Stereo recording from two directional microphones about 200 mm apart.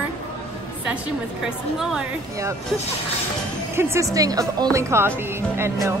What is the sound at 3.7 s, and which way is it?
Speech, 15° right (ahead or behind).